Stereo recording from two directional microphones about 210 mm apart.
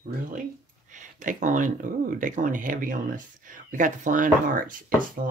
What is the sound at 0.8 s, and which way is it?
Speech, 35° right (ahead or behind).